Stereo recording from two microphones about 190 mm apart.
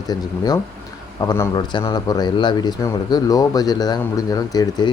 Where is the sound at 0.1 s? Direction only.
20° left (ahead or behind).